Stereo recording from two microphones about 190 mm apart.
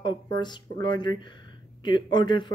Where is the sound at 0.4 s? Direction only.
20° left (ahead or behind).